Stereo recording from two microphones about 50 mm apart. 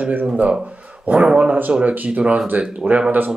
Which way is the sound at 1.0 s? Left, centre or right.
Right.